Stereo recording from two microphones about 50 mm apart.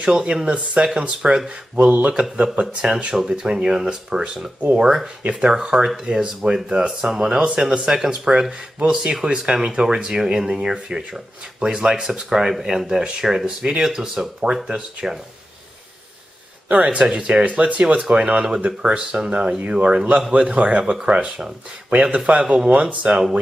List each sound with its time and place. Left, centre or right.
0.0 s speech: centre
5.2 s speech: right
5.5 s speech: centre
16.8 s speech: right
20.8 s speech: centre
21.9 s speech: right